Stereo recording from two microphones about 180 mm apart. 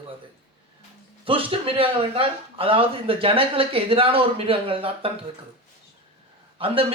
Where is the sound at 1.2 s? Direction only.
30° right (ahead or behind).